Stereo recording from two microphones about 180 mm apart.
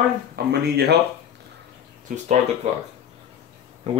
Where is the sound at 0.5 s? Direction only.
65° right (ahead or behind).